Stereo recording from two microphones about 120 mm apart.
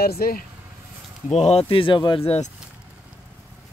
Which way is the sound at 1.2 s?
65° left (ahead or behind).